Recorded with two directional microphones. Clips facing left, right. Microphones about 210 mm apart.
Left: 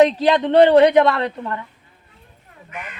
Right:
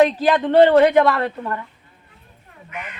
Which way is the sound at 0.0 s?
20° left (ahead or behind).